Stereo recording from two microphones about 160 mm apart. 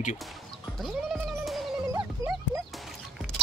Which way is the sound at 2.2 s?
20° right (ahead or behind).